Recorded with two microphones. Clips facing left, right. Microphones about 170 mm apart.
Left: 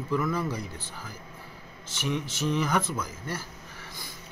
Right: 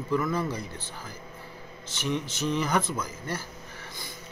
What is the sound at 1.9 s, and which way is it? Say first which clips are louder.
Speech: right 1 dB; 10° left (ahead or behind).